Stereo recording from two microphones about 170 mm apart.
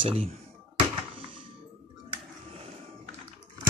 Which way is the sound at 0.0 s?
35° right (ahead or behind).